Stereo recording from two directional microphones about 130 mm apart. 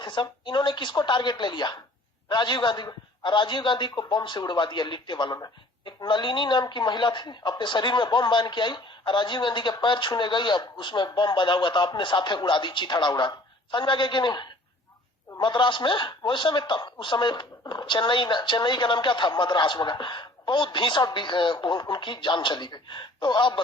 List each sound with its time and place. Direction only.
0.0 s a man's voice: 35° left (ahead or behind)